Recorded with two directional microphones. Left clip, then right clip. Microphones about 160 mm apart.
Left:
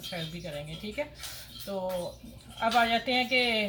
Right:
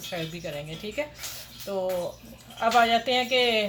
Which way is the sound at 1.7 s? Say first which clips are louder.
Right 5 dB; 30° right (ahead or behind).